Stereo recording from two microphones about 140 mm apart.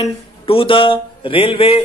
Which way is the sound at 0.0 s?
40° left (ahead or behind).